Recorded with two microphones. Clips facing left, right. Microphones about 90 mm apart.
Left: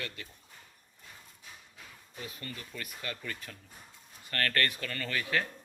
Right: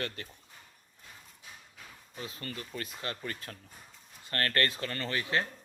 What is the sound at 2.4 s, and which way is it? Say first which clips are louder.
Speech: right 3 dB; 40° right (ahead or behind).